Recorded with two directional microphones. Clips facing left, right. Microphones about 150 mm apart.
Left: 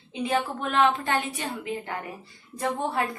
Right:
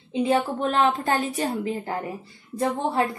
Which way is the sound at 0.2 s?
30° right (ahead or behind).